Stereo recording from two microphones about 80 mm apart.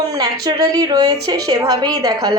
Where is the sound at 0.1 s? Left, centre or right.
Right.